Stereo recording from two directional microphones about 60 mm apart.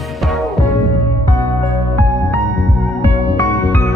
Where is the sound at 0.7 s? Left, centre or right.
Left.